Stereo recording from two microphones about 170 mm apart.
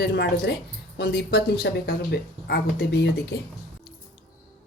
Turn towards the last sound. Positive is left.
turn(degrees=75)  # may be behind; listen again after turning